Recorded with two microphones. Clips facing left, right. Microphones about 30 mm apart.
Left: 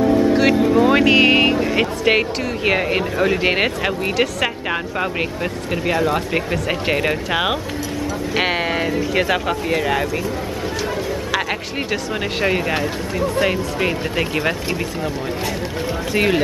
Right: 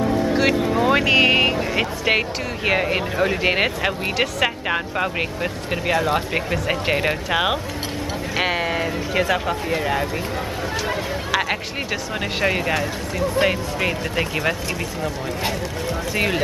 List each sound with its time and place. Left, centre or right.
0.0 s speech: centre
8.4 s speech: centre
11.9 s speech: centre
16.1 s speech: centre